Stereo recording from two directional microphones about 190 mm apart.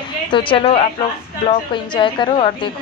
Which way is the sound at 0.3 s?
25° left (ahead or behind).